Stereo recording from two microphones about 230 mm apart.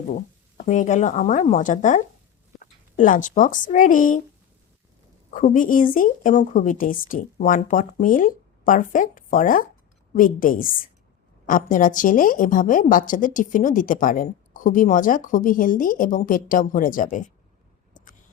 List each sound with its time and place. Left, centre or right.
0.1 s a woman's voice: left
3.0 s a woman's voice: left
5.3 s a woman's voice: left